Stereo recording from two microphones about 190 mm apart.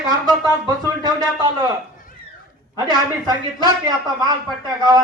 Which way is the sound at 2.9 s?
20° right (ahead or behind).